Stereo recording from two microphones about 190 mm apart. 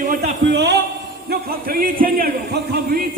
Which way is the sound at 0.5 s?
65° right (ahead or behind).